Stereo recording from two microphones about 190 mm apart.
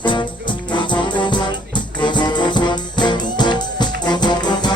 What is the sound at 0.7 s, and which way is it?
Music, 25° left (ahead or behind).